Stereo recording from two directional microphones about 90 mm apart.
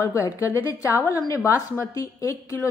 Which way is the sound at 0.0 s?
35° left (ahead or behind).